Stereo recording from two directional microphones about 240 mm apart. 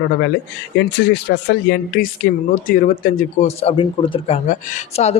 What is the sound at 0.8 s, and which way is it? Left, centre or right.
Speech, left.